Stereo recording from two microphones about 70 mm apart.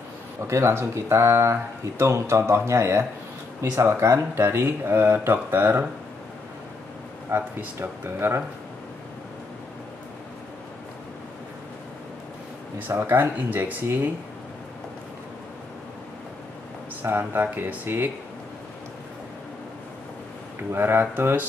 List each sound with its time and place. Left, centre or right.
0.5 s speech: right
7.2 s speech: right
12.8 s speech: right
17.0 s speech: right
20.7 s speech: right